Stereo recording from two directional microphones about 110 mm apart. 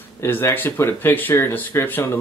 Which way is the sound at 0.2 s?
20° left (ahead or behind).